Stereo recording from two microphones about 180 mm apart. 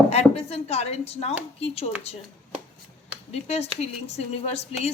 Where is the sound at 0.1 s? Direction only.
35° left (ahead or behind).